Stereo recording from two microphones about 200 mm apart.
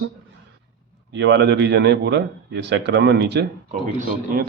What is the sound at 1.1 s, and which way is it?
Speech, 60° right (ahead or behind).